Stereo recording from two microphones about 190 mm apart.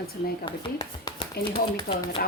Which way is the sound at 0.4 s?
25° left (ahead or behind).